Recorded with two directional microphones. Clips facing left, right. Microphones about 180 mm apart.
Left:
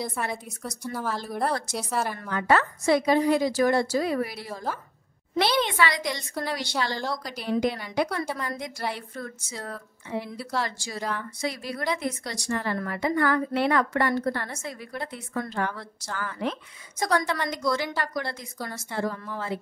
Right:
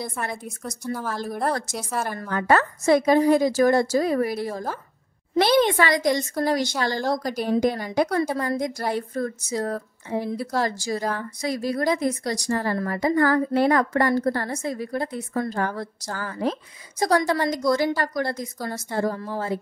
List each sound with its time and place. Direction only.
0.0 s a woman's voice: 5° left (ahead or behind)
1.7 s a woman's voice: 45° right (ahead or behind)